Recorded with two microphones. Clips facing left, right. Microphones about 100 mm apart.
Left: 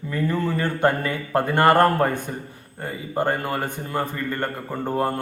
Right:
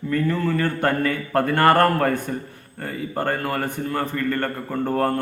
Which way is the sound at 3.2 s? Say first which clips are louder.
Left 1 dB; 20° left (ahead or behind).